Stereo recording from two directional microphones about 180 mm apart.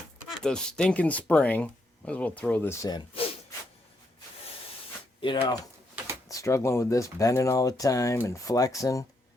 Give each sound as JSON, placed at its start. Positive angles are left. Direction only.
{"t": 0.4, "sound": "speech", "side_deg": 5}
{"t": 5.2, "sound": "speech", "side_deg": 25}